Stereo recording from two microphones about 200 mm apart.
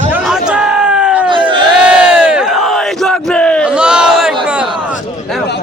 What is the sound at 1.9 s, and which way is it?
Battle cry, 5° right (ahead or behind).